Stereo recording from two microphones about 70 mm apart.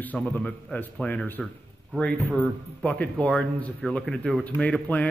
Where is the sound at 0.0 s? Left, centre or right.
Left.